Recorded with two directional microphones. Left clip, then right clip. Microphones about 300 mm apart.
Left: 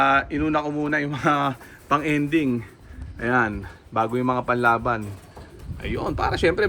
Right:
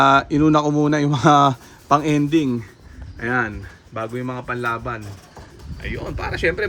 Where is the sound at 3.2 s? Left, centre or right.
Centre.